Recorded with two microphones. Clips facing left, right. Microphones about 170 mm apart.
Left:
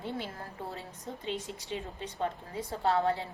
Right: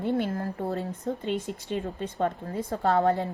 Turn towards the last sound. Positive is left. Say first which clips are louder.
# right 5 dB
turn(degrees=-45)  # may be behind; listen again after turning